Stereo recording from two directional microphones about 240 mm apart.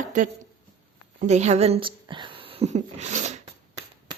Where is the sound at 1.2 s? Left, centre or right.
Right.